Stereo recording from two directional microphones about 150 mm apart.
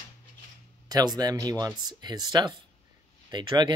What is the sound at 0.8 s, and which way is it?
Speech, 25° right (ahead or behind).